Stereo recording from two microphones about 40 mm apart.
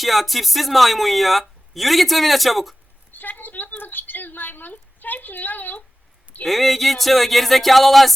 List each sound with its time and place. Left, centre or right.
0.0 s speech: centre
3.1 s a sound: left
6.4 s speech: centre